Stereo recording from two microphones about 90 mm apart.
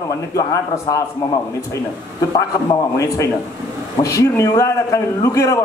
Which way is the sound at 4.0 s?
35° left (ahead or behind).